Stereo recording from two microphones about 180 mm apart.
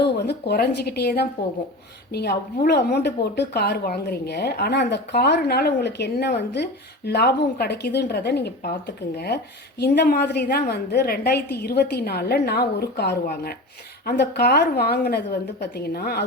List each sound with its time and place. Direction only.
0.0 s speech: 65° left (ahead or behind)